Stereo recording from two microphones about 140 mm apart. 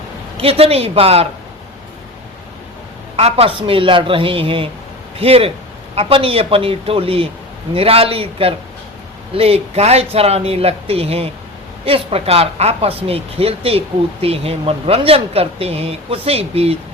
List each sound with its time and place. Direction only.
0.4 s speech: 45° right (ahead or behind)
3.2 s speech: 45° right (ahead or behind)